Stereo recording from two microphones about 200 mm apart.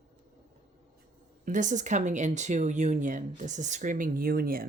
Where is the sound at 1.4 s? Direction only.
40° right (ahead or behind).